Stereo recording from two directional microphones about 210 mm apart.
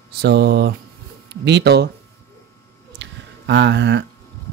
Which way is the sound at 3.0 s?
55° right (ahead or behind).